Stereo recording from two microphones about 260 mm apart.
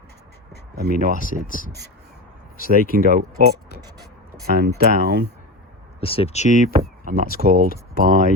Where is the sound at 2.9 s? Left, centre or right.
Right.